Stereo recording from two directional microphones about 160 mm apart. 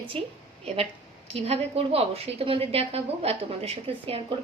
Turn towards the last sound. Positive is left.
turn(degrees=-35)  # may be behind; listen again after turning